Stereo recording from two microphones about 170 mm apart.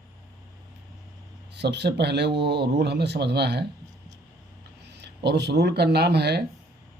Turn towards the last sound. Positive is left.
turn(degrees=-75)  # may be behind; listen again after turning